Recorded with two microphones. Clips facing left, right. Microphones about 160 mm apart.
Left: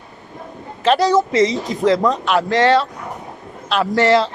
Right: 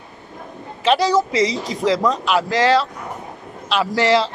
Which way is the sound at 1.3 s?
Centre (ahead or behind).